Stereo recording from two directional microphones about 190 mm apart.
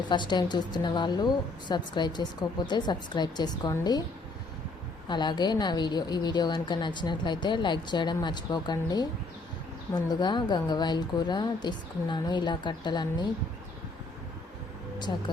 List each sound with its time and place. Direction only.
0.1 s a woman's voice: 25° left (ahead or behind)
5.0 s a woman's voice: 25° left (ahead or behind)
15.1 s a woman's voice: 20° left (ahead or behind)